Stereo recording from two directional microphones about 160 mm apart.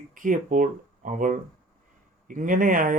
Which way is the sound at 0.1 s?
55° right (ahead or behind).